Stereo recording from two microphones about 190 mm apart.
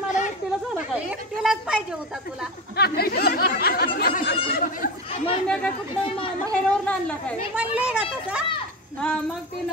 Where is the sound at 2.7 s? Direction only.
55° left (ahead or behind).